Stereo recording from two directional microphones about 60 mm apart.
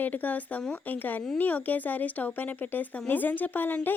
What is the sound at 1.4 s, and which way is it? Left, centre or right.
A woman's voice, left.